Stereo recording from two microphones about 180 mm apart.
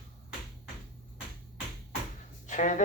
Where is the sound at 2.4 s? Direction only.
45° left (ahead or behind).